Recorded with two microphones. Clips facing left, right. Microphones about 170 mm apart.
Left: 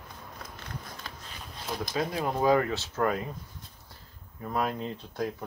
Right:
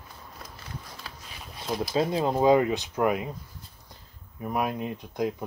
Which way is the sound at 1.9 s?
25° right (ahead or behind).